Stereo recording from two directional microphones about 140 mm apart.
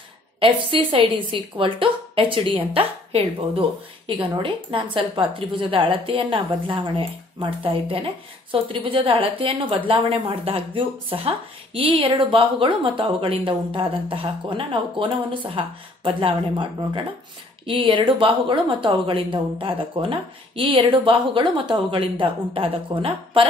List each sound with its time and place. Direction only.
0.4 s speech: 40° right (ahead or behind)